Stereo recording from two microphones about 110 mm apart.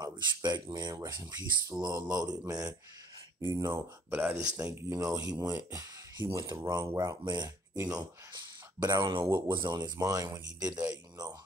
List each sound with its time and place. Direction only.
0.0 s speech: 40° right (ahead or behind)
4.1 s speech: 15° right (ahead or behind)
4.6 s speech: 25° right (ahead or behind); by 7.5 s 40° right (ahead or behind)
7.7 s speech: 25° right (ahead or behind)
8.7 s speech: 40° right (ahead or behind)